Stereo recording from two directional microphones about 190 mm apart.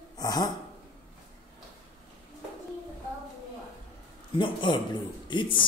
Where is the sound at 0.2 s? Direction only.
20° left (ahead or behind).